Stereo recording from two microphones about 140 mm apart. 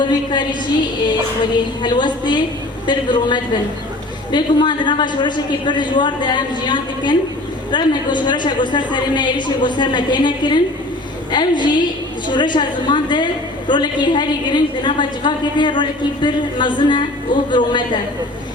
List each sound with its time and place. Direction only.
0.0 s a woman's voice: 35° left (ahead or behind)
1.8 s a woman's voice: 35° left (ahead or behind)